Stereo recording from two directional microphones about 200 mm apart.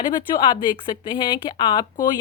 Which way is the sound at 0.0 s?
20° left (ahead or behind).